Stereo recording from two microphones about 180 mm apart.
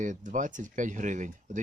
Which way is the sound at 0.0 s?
45° right (ahead or behind).